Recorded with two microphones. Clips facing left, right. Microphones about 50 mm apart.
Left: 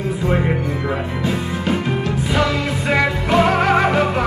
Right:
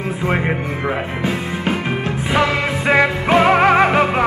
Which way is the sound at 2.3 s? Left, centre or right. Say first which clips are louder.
Right 3 dB; right.